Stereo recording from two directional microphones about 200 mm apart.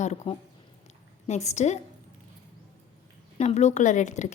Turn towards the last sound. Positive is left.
turn(degrees=35)  # may be behind; listen again after turning